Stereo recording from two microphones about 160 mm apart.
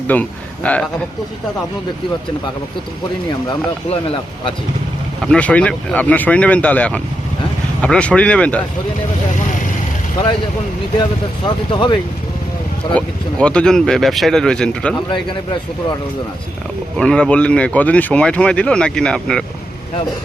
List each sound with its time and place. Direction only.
0.1 s a man's voice: 10° left (ahead or behind)
3.8 s speech: 35° left (ahead or behind)
5.2 s speech: 5° left (ahead or behind)
11.4 s speech: 30° left (ahead or behind)
13.4 s speech: 5° left (ahead or behind)
17.0 s speech: 5° left (ahead or behind)